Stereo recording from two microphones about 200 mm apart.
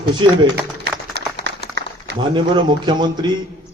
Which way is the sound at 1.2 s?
60° right (ahead or behind).